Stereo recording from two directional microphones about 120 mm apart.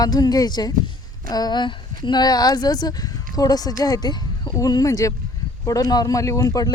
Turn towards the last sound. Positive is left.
turn(degrees=30)  # may be behind; listen again after turning